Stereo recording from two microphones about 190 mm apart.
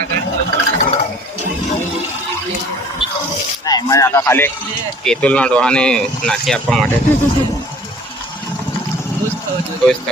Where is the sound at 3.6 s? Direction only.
20° left (ahead or behind); by 6.8 s centre (ahead or behind).